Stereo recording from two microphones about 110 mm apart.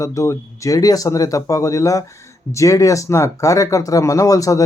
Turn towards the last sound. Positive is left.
turn(degrees=30)  # may be behind; listen again after turning